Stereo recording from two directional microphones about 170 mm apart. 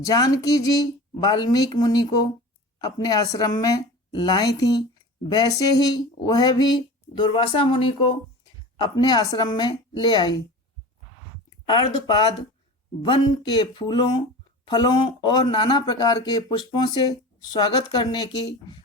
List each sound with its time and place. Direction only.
0.0 s speech: 20° left (ahead or behind)
11.6 s speech: 25° left (ahead or behind)